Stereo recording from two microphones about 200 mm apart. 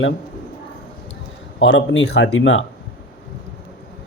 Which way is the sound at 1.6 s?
70° left (ahead or behind).